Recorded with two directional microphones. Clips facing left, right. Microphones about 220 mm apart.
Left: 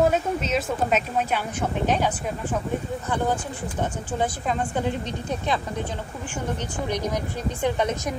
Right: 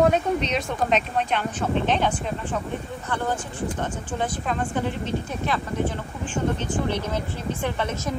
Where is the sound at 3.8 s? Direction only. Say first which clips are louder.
Left 5 dB; 10° left (ahead or behind).